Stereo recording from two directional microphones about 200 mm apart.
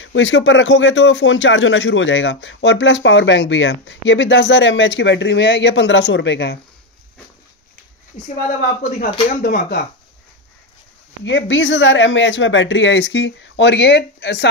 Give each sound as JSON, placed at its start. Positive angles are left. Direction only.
{"t": 0.0, "sound": "speech", "side_deg": 70}
{"t": 9.4, "sound": "speech", "side_deg": 50}
{"t": 11.2, "sound": "speech", "side_deg": 65}